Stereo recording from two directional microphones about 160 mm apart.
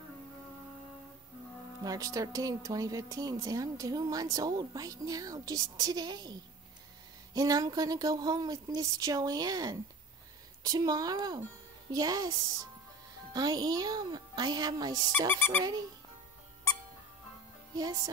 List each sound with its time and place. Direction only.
1.8 s speech: 20° right (ahead or behind)
7.3 s speech: 25° right (ahead or behind)
17.7 s speech: 25° right (ahead or behind)